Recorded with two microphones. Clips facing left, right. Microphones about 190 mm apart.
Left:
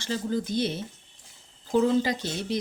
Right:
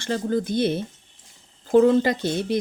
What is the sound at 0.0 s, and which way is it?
Speech, 55° right (ahead or behind).